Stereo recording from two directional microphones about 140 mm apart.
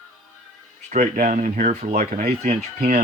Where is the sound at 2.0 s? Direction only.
80° right.